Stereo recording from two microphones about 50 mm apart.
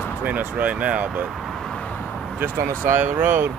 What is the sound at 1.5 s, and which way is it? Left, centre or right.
Vehicle, centre.